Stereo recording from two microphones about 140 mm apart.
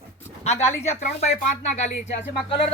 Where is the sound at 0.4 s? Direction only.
50° left (ahead or behind).